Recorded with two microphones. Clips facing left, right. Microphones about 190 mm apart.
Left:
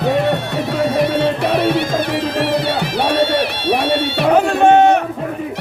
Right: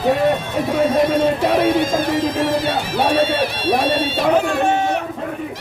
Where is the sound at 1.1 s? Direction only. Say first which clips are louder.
Even; 65° left (ahead or behind).